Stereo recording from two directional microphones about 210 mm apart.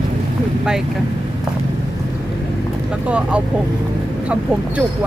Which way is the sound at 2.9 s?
5° right (ahead or behind).